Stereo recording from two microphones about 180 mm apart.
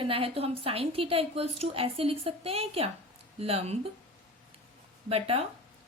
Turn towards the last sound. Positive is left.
turn(degrees=-35)  # may be behind; listen again after turning